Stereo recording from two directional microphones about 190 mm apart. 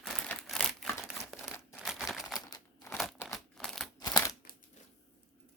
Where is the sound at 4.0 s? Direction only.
20° left (ahead or behind).